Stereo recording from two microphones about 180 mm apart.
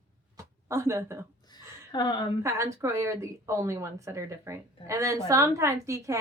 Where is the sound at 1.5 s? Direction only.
25° left (ahead or behind).